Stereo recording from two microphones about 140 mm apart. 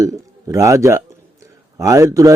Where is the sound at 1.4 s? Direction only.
20° right (ahead or behind).